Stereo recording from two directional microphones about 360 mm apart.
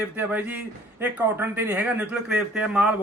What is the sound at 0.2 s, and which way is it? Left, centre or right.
A man's voice, centre.